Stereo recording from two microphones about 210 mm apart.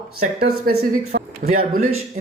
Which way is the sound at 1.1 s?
45° right (ahead or behind).